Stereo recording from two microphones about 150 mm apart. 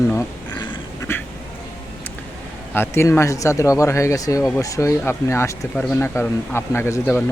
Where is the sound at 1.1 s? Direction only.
15° left (ahead or behind).